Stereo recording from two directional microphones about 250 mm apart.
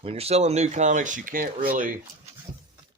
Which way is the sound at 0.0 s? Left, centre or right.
Right.